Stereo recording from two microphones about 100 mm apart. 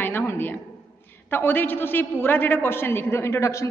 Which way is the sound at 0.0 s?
20° left (ahead or behind).